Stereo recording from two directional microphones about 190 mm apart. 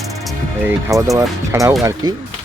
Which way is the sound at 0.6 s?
15° right (ahead or behind).